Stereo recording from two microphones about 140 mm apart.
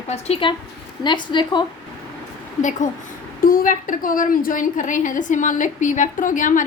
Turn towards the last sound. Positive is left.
turn(degrees=65)  # may be behind; listen again after turning